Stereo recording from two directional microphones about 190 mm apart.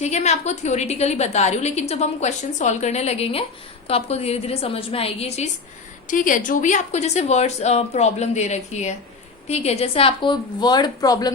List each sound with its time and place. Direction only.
0.0 s a woman's voice: 35° left (ahead or behind)
6.1 s a woman's voice: 45° left (ahead or behind); by 11.3 s 20° left (ahead or behind)